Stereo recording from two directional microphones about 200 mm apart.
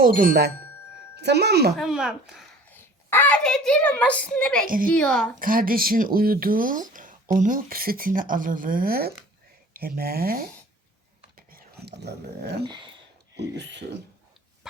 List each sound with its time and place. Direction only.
0.0 s speech: 45° right (ahead or behind)
1.7 s speech: centre (ahead or behind)
2.6 s a woman's voice: 10° left (ahead or behind)
4.6 s speech: 45° right (ahead or behind)
4.9 s speech: 5° left (ahead or behind)
5.4 s speech: 45° right (ahead or behind)
11.3 s whispering: 50° right (ahead or behind)
12.6 s speech: 20° right (ahead or behind)
13.3 s speech: 60° right (ahead or behind)